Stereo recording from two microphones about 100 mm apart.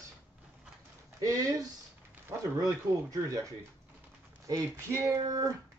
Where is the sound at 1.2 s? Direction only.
35° right (ahead or behind).